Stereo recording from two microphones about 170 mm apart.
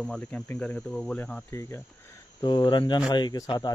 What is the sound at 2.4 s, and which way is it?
Speech, 25° left (ahead or behind).